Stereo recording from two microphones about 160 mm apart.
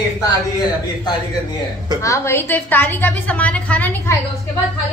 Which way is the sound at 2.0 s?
15° left (ahead or behind).